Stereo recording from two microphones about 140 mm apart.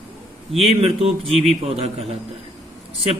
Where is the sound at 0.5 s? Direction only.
45° right (ahead or behind).